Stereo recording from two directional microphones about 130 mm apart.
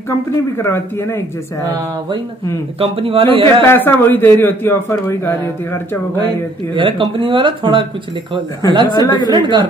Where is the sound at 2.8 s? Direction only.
45° right (ahead or behind).